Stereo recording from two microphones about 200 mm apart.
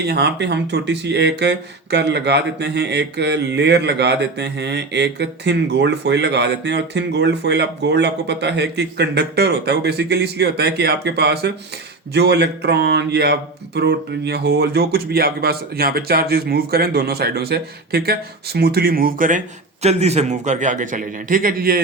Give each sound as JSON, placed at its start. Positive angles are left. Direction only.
{"t": 0.1, "sound": "speech", "side_deg": -60}
{"t": 19.8, "sound": "a man's voice", "side_deg": -35}